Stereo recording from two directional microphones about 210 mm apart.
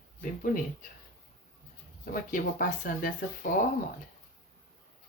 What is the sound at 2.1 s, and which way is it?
Speech, 40° left (ahead or behind).